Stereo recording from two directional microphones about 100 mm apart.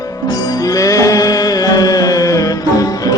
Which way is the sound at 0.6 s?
35° left (ahead or behind).